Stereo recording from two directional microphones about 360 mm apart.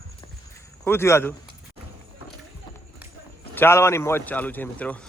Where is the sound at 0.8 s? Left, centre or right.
Centre.